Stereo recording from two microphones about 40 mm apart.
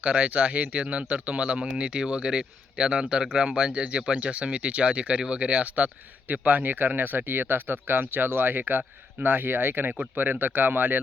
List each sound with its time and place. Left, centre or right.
0.0 s speech: right